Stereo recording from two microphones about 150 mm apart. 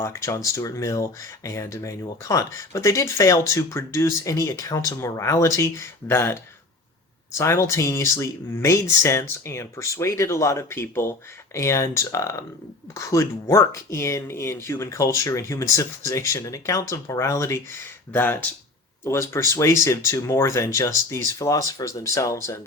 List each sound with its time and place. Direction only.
0.0 s speech: 20° left (ahead or behind)